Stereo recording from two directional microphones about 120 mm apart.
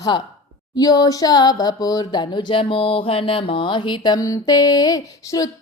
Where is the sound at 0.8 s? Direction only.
30° left (ahead or behind).